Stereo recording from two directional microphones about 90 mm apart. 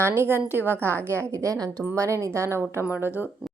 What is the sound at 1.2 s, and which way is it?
A woman's voice, 35° right (ahead or behind).